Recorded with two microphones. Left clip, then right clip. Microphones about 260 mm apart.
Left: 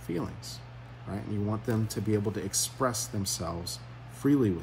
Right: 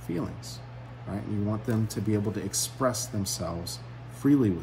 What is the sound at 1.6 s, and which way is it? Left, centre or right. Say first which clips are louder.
Speech: right 1 dB; centre.